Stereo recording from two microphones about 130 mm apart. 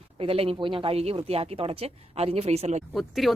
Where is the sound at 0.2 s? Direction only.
45° right (ahead or behind).